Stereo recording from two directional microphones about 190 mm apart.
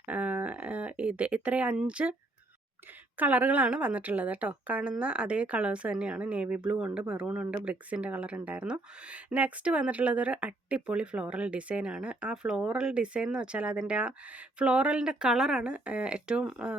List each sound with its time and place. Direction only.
0.0 s speech: 10° right (ahead or behind)
3.2 s a woman's voice: 10° right (ahead or behind)